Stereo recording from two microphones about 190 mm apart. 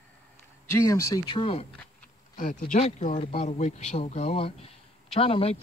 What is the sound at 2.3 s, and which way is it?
Speech, 45° left (ahead or behind).